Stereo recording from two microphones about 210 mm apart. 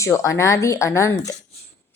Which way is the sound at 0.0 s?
15° left (ahead or behind).